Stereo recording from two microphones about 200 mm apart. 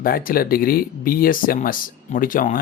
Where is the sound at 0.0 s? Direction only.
45° left (ahead or behind).